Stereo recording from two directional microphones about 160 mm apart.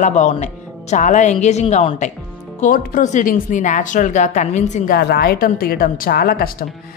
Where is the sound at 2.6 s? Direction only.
60° left (ahead or behind).